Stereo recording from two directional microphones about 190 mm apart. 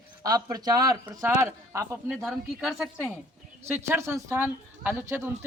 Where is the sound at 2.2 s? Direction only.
Centre (ahead or behind).